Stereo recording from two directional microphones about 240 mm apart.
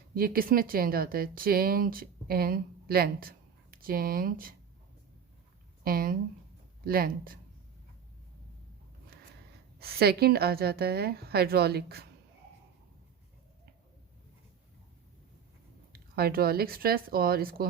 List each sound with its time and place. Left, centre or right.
0.1 s speech: right
5.8 s a woman's voice: right
9.7 s a woman's voice: right
15.9 s a woman's voice: right